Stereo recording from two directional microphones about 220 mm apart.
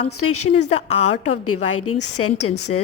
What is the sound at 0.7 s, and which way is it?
Speech, 30° left (ahead or behind).